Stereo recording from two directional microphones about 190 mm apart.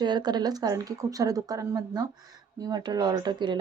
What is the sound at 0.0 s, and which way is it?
Speech, 20° right (ahead or behind).